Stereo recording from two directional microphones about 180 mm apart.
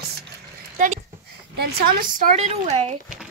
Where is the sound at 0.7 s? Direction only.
45° right (ahead or behind).